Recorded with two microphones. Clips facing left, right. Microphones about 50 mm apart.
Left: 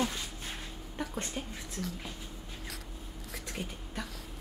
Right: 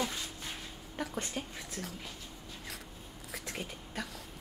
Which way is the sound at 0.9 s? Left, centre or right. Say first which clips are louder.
Even; centre.